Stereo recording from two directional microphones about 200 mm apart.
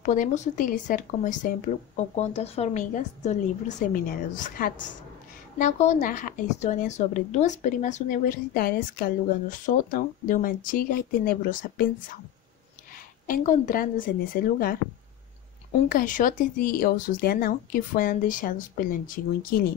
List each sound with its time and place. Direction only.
0.0 s a woman's voice: 40° left (ahead or behind)
13.3 s speech: 40° left (ahead or behind)
15.9 s speech: 40° left (ahead or behind)